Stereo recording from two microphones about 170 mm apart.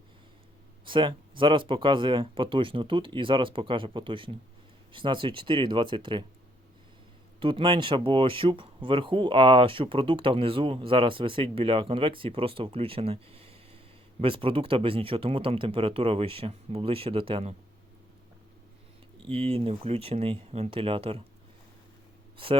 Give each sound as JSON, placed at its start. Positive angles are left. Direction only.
{"t": 0.9, "sound": "speech", "side_deg": -30}
{"t": 7.3, "sound": "speech", "side_deg": -30}
{"t": 19.3, "sound": "speech", "side_deg": -35}